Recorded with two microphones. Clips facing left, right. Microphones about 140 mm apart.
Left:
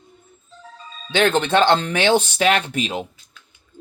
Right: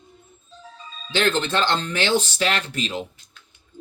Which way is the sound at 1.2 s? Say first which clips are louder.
Left 5 dB; 60° left (ahead or behind).